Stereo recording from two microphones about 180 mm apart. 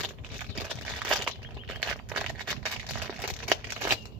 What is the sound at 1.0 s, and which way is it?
Crumpling, centre (ahead or behind).